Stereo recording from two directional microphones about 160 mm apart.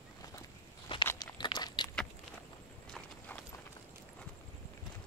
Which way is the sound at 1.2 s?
25° left (ahead or behind).